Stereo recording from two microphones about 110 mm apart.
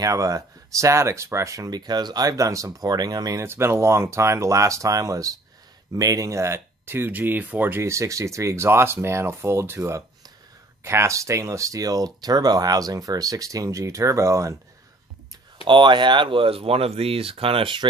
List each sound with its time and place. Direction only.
0.0 s speech: 30° right (ahead or behind)
3.4 s speech: 25° right (ahead or behind)
15.6 s speech: 45° right (ahead or behind)